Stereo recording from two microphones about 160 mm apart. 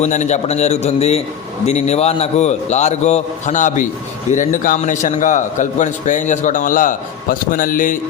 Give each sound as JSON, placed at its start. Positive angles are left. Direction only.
{"t": 0.0, "sound": "a man's voice", "side_deg": 45}